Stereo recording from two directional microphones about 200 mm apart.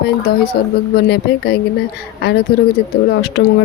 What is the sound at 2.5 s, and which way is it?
Speech, 25° left (ahead or behind).